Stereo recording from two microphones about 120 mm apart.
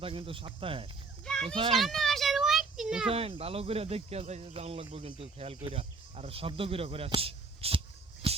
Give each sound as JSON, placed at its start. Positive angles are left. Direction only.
{"t": 0.0, "sound": "speech", "side_deg": -50}
{"t": 1.2, "sound": "children playing", "side_deg": 5}
{"t": 1.7, "sound": "a sound", "side_deg": 0}
{"t": 3.1, "sound": "speech", "side_deg": -55}
{"t": 8.2, "sound": "music", "side_deg": -40}